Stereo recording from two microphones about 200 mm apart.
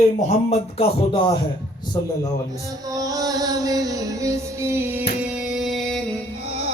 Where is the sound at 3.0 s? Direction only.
15° right (ahead or behind).